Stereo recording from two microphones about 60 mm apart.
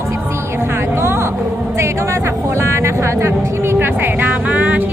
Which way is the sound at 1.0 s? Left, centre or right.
Right.